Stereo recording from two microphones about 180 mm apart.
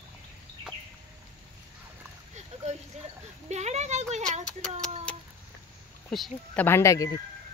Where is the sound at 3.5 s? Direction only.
40° right (ahead or behind).